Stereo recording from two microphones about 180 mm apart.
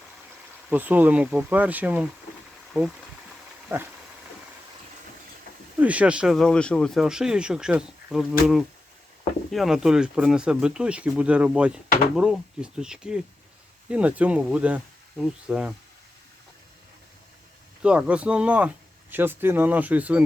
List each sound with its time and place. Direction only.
0.7 s speech: 10° right (ahead or behind)
5.8 s speech: 5° right (ahead or behind)
17.8 s speech: 5° right (ahead or behind)